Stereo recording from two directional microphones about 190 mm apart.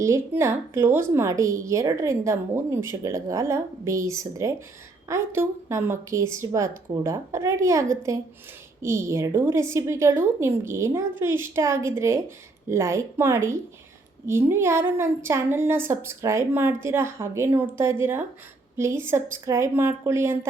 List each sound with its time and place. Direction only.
0.0 s a woman's voice: 15° right (ahead or behind)